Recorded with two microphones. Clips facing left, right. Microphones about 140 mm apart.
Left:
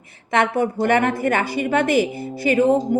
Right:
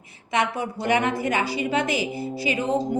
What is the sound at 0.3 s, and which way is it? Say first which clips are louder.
A woman's voice: left 6 dB; 55° left (ahead or behind).